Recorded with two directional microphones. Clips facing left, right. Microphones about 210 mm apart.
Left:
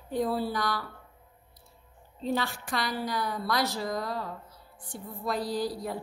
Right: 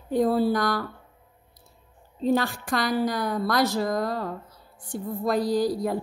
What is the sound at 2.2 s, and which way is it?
A woman's voice, 45° right (ahead or behind).